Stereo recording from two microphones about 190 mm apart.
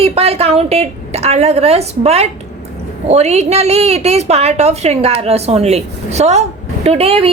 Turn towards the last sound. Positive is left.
turn(degrees=-30)  # may be behind; listen again after turning